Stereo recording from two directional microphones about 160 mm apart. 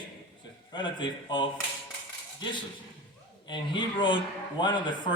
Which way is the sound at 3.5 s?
30° left (ahead or behind).